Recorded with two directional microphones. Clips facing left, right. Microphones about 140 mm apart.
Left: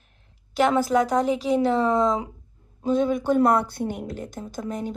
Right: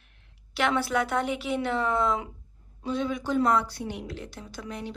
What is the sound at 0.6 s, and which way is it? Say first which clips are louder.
A woman's voice: left 6 dB; 40° left (ahead or behind).